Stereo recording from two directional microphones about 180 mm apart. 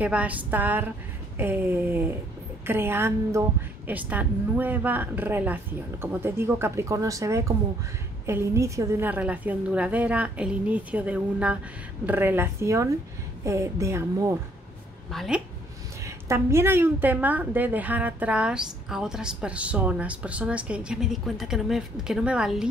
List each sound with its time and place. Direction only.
0.0 s a woman's voice: 10° right (ahead or behind)
15.0 s a woman's voice: centre (ahead or behind)
16.0 s a woman's voice: 15° right (ahead or behind)